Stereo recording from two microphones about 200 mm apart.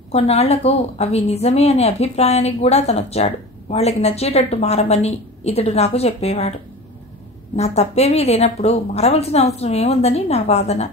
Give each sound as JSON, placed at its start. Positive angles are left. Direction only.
{"t": 0.1, "sound": "a woman's voice", "side_deg": 30}
{"t": 7.5, "sound": "a woman's voice", "side_deg": 30}